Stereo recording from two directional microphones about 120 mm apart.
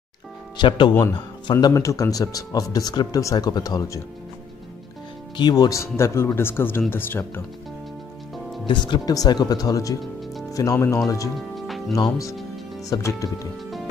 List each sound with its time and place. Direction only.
0.6 s speech: 40° left (ahead or behind)
0.9 s speech: 30° left (ahead or behind)
5.4 s speech: 35° left (ahead or behind); by 7.4 s 20° left (ahead or behind)
8.6 s speech: 40° left (ahead or behind); by 11.0 s 25° left (ahead or behind)
11.3 s music: centre (ahead or behind)
11.9 s speech: 25° left (ahead or behind)